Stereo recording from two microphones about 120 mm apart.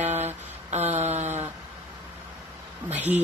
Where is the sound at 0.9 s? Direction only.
70° right (ahead or behind).